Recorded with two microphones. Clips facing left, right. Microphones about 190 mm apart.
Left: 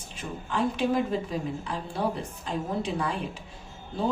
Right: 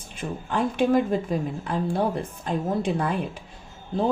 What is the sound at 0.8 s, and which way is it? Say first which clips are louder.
Speech: right 8 dB; 55° right (ahead or behind).